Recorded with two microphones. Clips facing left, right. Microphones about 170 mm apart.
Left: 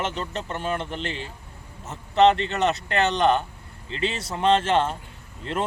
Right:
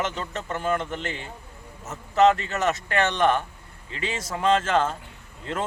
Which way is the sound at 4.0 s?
30° left (ahead or behind).